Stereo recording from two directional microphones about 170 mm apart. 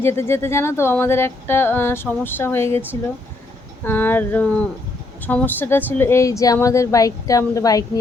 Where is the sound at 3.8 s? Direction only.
10° left (ahead or behind).